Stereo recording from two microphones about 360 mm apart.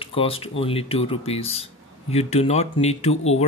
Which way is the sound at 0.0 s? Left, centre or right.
Centre.